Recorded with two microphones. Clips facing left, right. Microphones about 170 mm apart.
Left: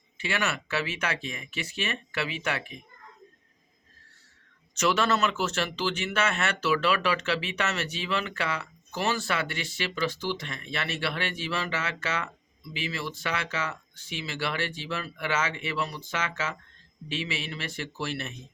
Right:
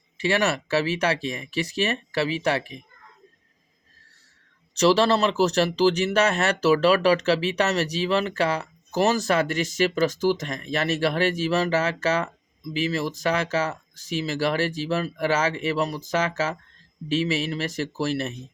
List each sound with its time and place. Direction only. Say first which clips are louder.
0.2 s speech: right 8 dB; 35° right (ahead or behind)
4.7 s speech: right 7 dB; 35° right (ahead or behind)